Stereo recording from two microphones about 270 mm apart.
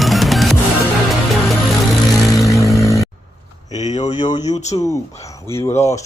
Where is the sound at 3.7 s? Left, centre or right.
Left.